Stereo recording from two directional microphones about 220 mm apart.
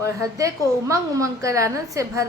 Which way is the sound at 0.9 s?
15° right (ahead or behind).